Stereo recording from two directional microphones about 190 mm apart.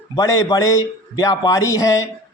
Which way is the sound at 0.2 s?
20° left (ahead or behind).